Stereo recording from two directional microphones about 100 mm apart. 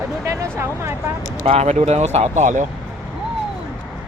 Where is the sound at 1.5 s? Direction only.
90° right.